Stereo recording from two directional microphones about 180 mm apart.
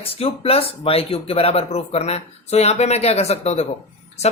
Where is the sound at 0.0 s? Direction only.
35° left (ahead or behind).